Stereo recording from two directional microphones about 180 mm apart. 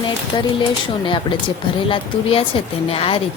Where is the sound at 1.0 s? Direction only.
25° left (ahead or behind).